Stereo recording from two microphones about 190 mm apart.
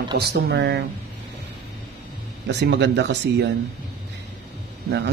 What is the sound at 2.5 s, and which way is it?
Speech, 65° right (ahead or behind).